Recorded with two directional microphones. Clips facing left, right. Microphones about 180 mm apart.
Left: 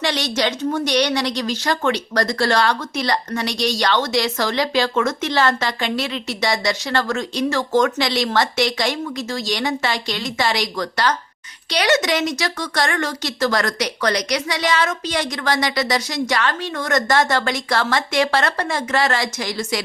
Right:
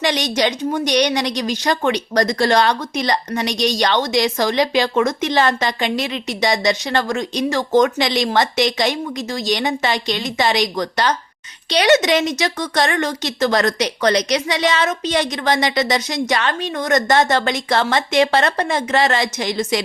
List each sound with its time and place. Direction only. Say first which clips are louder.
0.0 s a woman's voice: right 3 dB; 15° right (ahead or behind)